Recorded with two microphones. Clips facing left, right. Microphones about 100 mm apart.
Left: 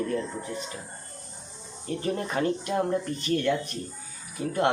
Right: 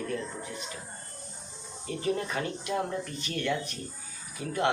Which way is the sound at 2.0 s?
40° left (ahead or behind).